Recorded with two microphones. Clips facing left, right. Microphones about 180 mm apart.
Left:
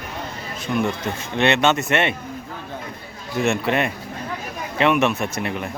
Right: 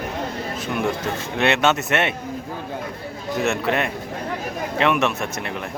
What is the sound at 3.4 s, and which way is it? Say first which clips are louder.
Speech: left 2 dB; centre (ahead or behind).